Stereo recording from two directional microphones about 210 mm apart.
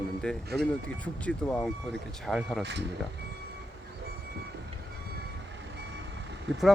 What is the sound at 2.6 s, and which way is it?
Speech, 55° right (ahead or behind).